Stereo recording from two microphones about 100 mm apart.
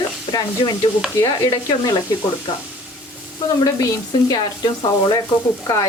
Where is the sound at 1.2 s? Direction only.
35° left (ahead or behind).